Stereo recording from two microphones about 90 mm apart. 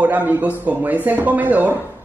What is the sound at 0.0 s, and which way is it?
A woman's voice, 20° right (ahead or behind).